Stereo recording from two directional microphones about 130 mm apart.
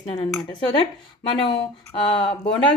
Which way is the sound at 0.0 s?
45° left (ahead or behind).